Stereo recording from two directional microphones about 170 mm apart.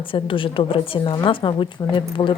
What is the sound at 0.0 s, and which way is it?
A woman's voice, 30° left (ahead or behind).